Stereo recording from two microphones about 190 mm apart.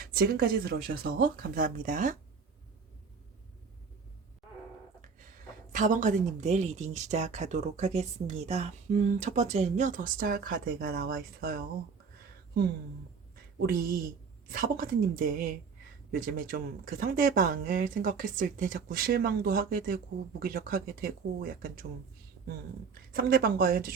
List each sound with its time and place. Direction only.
0.0 s speech: 50° right (ahead or behind)
5.7 s speech: 40° right (ahead or behind)
13.6 s speech: 50° right (ahead or behind)
23.1 s speech: 50° right (ahead or behind)